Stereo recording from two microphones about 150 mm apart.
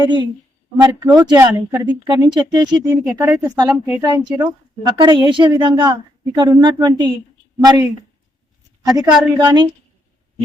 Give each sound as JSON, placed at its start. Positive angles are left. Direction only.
{"t": 0.0, "sound": "a woman's voice", "side_deg": -30}
{"t": 8.9, "sound": "speech", "side_deg": -25}